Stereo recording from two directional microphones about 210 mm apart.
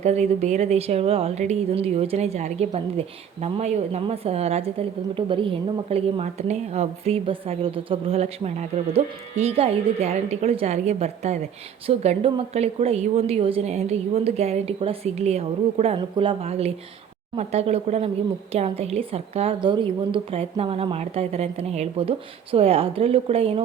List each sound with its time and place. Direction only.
0.0 s a woman's voice: 30° right (ahead or behind)